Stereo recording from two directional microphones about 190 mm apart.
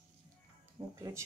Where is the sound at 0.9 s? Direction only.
15° right (ahead or behind).